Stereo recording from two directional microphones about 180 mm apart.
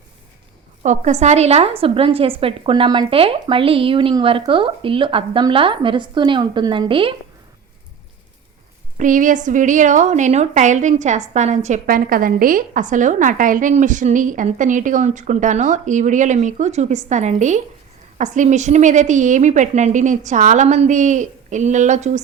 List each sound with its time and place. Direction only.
0.8 s a woman's voice: 40° right (ahead or behind)
9.0 s a woman's voice: 45° right (ahead or behind)